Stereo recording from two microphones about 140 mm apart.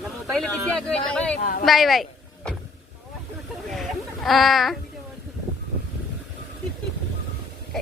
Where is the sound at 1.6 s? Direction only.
Centre (ahead or behind).